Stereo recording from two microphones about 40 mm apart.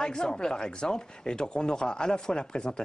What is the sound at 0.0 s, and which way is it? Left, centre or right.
Speech, centre.